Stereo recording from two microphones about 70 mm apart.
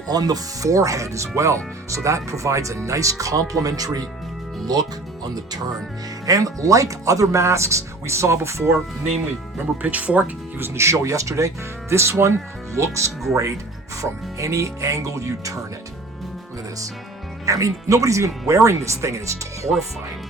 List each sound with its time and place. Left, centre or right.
0.1 s speech: right
6.2 s speech: right
9.8 s speech: centre
10.6 s speech: right
17.4 s speech: right